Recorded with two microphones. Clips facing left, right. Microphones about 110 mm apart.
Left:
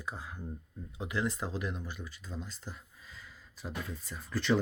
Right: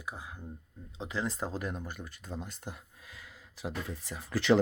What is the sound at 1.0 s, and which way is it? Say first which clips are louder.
Speech: even; 30° right (ahead or behind).